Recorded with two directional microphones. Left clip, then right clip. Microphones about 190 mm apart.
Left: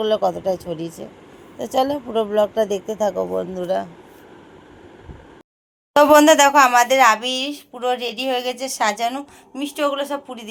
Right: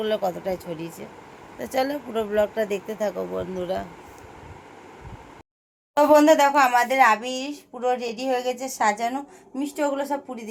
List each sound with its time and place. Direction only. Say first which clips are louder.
0.0 s speech: left 6 dB; 15° left (ahead or behind)
5.9 s speech: left 4 dB; 5° left (ahead or behind)